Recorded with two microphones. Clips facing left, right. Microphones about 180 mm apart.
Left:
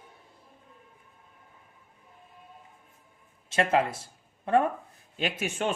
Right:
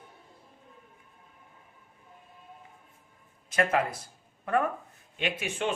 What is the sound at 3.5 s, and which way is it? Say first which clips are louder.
Speech: left 2 dB; 25° left (ahead or behind).